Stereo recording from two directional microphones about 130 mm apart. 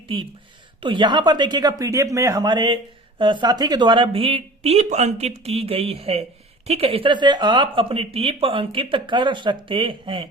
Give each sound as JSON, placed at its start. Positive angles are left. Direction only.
{"t": 0.8, "sound": "speech", "side_deg": -40}